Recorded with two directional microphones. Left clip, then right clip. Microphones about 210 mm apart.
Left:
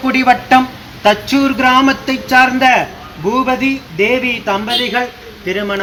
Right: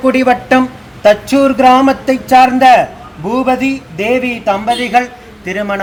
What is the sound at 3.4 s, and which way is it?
Speech, 45° right (ahead or behind).